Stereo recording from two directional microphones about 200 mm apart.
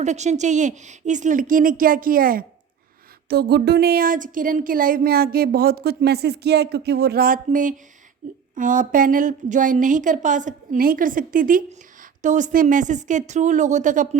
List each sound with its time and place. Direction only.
0.0 s a woman's voice: 35° right (ahead or behind)